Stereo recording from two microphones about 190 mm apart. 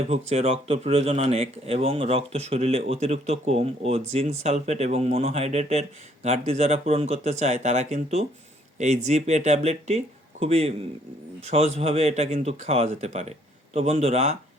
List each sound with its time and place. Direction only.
0.1 s speech: 35° right (ahead or behind)